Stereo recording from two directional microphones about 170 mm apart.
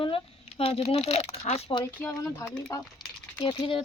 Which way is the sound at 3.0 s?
25° left (ahead or behind).